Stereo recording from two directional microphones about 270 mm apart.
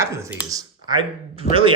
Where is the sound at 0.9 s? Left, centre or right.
Centre.